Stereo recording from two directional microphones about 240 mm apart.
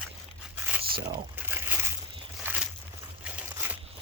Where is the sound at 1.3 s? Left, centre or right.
Centre.